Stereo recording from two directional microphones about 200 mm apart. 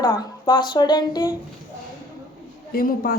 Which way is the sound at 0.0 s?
20° left (ahead or behind).